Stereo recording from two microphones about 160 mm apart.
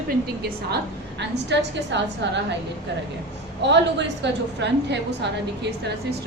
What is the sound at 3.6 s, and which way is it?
A woman's voice, 90° right.